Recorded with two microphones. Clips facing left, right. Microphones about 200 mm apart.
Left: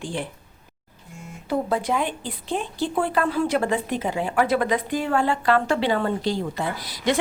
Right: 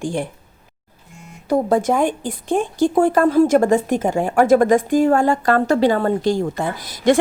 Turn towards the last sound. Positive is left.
turn(degrees=-50)  # may be behind; listen again after turning